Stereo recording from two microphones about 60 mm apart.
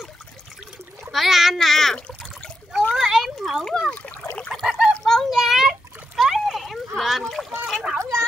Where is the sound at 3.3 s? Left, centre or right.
Centre.